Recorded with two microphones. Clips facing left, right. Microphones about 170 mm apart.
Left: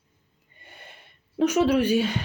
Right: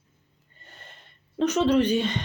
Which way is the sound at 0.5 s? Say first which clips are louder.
Left 2 dB; 10° left (ahead or behind).